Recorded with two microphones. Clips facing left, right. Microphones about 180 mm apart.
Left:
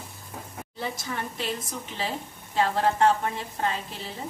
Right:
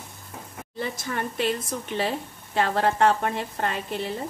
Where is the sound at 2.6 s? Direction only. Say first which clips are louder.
Right 1 dB; 65° right (ahead or behind).